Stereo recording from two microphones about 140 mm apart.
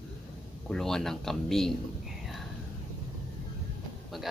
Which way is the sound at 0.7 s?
5° left (ahead or behind).